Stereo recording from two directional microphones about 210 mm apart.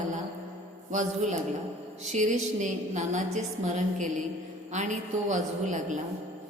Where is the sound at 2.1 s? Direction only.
35° right (ahead or behind).